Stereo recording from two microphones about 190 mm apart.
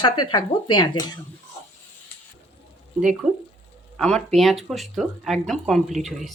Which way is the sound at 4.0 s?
5° left (ahead or behind).